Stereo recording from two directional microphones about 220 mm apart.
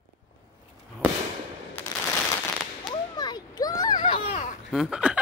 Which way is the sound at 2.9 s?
20° left (ahead or behind).